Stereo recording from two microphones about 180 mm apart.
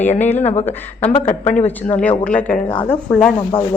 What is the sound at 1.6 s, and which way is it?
A woman's voice, 5° left (ahead or behind).